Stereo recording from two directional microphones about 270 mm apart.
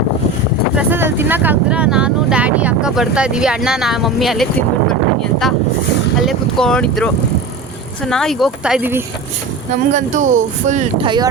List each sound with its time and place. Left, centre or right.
0.8 s speech: centre
6.1 s speech: centre
9.9 s speech: right